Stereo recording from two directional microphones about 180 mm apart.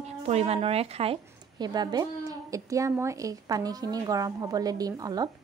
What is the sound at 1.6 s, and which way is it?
Speech, 20° right (ahead or behind).